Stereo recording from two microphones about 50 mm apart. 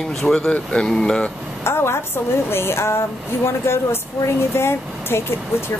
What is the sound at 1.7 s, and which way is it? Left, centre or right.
A woman's voice, left.